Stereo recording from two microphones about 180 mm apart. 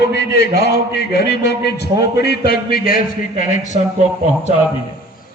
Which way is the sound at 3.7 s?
35° right (ahead or behind).